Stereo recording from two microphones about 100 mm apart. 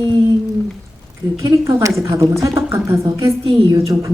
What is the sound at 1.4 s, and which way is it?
Speech, 30° right (ahead or behind).